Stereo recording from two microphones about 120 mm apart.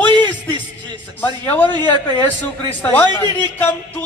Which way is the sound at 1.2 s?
15° left (ahead or behind).